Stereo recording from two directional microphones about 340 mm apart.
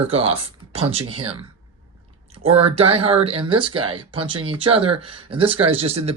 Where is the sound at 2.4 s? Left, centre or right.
Centre.